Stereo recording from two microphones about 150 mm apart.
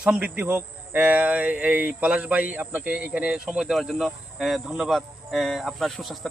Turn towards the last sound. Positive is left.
turn(degrees=0)  # may be behind; listen again after turning